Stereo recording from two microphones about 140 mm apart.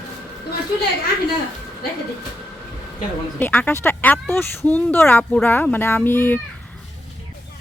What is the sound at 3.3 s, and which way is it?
Speech, 10° left (ahead or behind).